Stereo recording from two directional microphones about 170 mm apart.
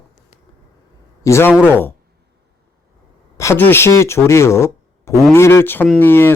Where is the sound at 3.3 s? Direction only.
15° left (ahead or behind).